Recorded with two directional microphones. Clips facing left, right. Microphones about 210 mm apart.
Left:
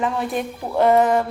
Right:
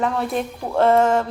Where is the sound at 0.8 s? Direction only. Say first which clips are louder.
Even; 15° left (ahead or behind).